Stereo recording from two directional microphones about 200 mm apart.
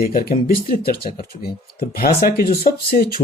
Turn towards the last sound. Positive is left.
turn(degrees=50)  # may be behind; listen again after turning